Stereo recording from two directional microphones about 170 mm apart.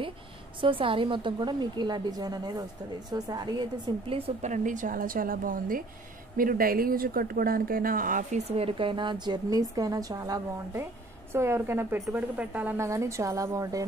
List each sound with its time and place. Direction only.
0.6 s a woman's voice: 30° right (ahead or behind)
4.4 s a woman's voice: 45° right (ahead or behind); by 13.8 s 20° right (ahead or behind)